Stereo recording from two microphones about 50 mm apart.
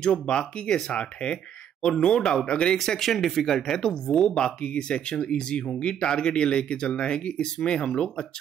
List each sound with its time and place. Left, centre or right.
0.0 s speech: centre
2.8 s speech: centre